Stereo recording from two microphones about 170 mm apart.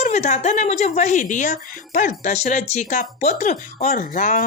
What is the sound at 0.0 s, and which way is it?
Speech, 45° left (ahead or behind).